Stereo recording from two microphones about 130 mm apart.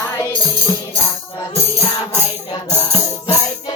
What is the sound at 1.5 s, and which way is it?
Music, 20° left (ahead or behind).